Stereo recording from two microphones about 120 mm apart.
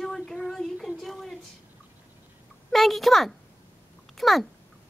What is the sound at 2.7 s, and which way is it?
Speech, centre (ahead or behind).